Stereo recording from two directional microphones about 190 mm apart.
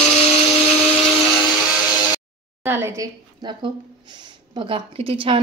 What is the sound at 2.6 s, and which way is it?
A woman's voice, 10° right (ahead or behind).